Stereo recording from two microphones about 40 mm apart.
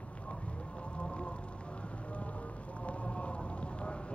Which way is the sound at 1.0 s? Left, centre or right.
Left.